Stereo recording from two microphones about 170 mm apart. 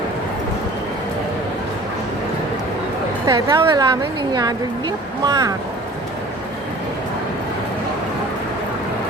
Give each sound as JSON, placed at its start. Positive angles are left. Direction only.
{"t": 3.2, "sound": "a woman's voice", "side_deg": -20}